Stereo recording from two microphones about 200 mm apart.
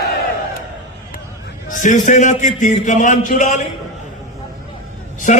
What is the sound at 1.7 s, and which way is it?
A man's voice, 40° left (ahead or behind).